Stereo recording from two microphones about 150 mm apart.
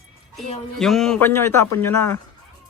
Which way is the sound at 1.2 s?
15° left (ahead or behind).